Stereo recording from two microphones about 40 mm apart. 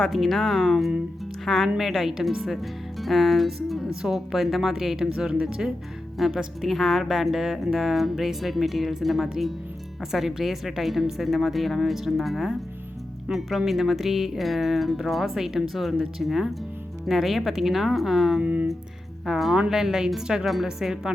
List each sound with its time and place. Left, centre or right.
0.1 s a woman's voice: centre
5.3 s speech: right
6.1 s a woman's voice: centre
18.4 s speech: right
19.2 s a woman's voice: centre
19.5 s a woman's voice: centre